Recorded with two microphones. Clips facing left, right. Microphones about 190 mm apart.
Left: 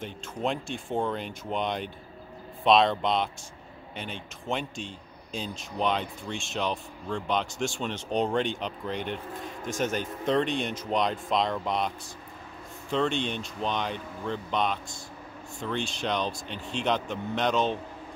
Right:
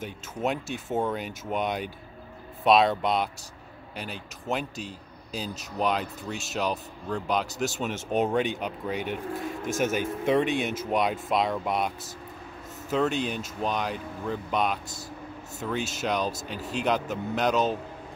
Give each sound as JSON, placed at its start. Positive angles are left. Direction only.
{"t": 0.0, "sound": "speech", "side_deg": -5}
{"t": 12.9, "sound": "speech", "side_deg": -5}